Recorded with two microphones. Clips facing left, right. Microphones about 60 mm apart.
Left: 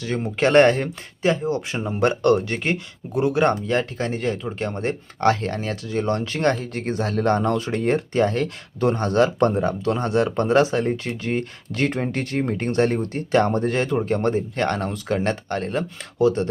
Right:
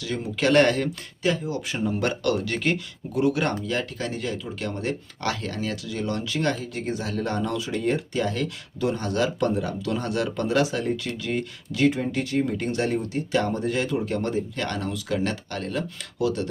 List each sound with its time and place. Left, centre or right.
0.0 s speech: left